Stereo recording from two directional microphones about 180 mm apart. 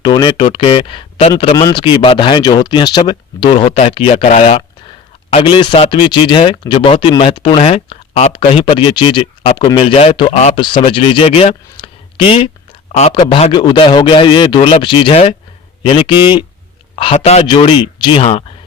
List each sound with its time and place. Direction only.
0.0 s speech: 25° left (ahead or behind)
9.4 s a man's voice: 40° left (ahead or behind)